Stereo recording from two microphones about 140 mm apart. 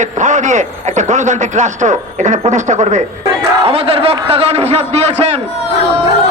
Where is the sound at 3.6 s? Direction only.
45° right (ahead or behind).